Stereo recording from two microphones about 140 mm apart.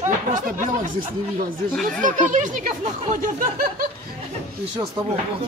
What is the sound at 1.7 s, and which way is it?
Speech, 5° left (ahead or behind).